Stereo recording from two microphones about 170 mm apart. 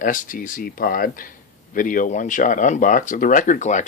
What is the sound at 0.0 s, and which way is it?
Speech, 50° left (ahead or behind).